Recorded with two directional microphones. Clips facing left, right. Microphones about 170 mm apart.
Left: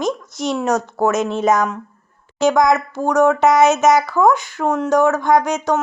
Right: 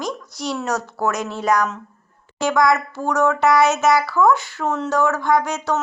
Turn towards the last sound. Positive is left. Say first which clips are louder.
# left 4 dB
turn(degrees=20)  # may be behind; listen again after turning